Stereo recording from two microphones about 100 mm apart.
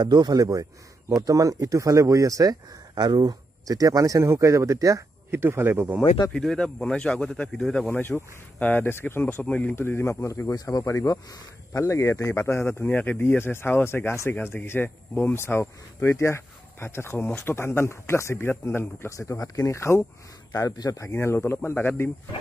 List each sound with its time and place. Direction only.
0.0 s speech: 45° right (ahead or behind); by 5.9 s 20° right (ahead or behind)
6.3 s speech: 5° left (ahead or behind)
7.9 s speech: 20° left (ahead or behind)
10.5 s speech: 40° left (ahead or behind)
20.5 s speech: 40° left (ahead or behind)
21.1 s speech: 25° left (ahead or behind)